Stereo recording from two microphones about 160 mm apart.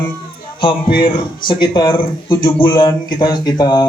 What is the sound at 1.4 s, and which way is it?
A man's voice, 30° left (ahead or behind).